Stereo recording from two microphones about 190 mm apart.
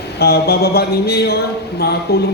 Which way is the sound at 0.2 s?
55° left (ahead or behind).